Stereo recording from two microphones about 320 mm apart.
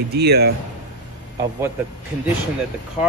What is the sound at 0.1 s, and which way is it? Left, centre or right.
Speech, right.